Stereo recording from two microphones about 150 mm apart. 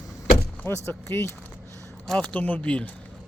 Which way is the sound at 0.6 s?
15° left (ahead or behind).